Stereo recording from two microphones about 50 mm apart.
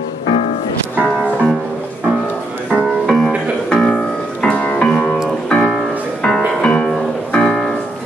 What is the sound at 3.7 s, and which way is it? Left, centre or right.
Music, centre.